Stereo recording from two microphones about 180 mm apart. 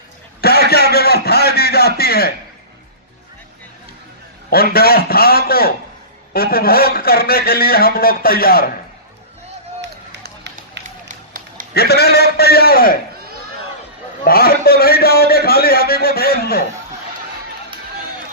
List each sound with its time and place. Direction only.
0.4 s a sound: 60° left (ahead or behind)
4.4 s a man's voice: 55° left (ahead or behind)
9.8 s run: 70° right (ahead or behind)
10.8 s run: 45° right (ahead or behind)
11.7 s a man's voice: 65° left (ahead or behind)
14.3 s a man's voice: 55° left (ahead or behind)